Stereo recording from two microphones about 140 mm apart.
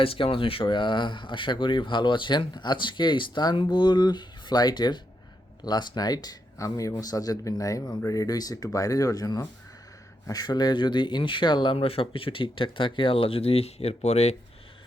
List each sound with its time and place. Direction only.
0.0 s speech: 40° left (ahead or behind)